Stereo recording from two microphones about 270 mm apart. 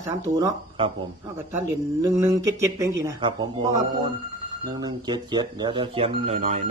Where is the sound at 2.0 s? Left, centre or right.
Centre.